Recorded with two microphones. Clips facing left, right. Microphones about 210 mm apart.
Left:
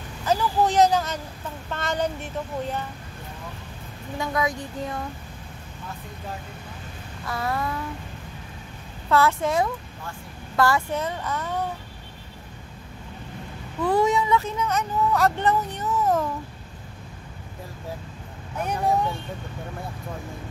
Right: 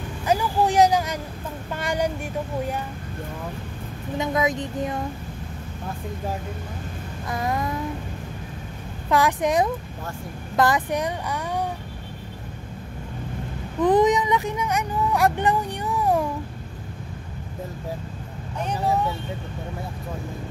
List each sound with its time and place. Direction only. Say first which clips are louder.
0.2 s speech: right 1 dB; 10° right (ahead or behind)
4.2 s a woman's voice: right 3 dB; 20° right (ahead or behind)
7.2 s speech: right 1 dB; 15° right (ahead or behind)
9.1 s speech: right 1 dB; 15° right (ahead or behind)
13.7 s speech: right 3 dB; 20° right (ahead or behind)